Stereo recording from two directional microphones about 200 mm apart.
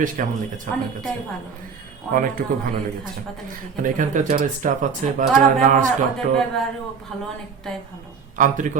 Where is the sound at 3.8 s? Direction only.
40° right (ahead or behind).